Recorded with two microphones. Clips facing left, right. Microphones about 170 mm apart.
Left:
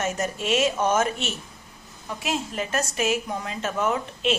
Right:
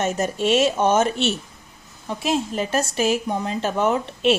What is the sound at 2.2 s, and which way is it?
Speech, 30° right (ahead or behind).